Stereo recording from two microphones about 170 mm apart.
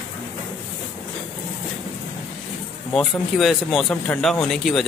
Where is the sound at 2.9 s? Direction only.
Centre (ahead or behind).